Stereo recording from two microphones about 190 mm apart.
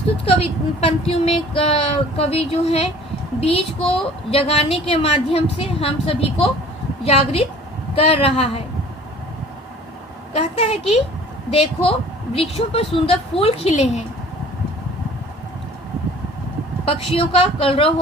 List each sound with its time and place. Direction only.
0.3 s speech: 30° left (ahead or behind)
10.3 s speech: 35° left (ahead or behind)
16.8 s a woman's voice: 30° left (ahead or behind)